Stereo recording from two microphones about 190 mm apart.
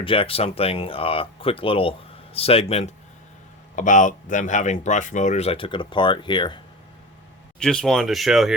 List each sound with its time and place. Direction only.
0.0 s speech: 30° left (ahead or behind)
7.6 s speech: 5° left (ahead or behind)